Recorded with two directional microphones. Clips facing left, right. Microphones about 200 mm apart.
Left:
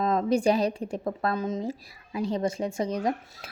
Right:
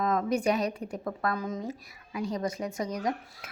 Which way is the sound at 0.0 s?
30° left (ahead or behind).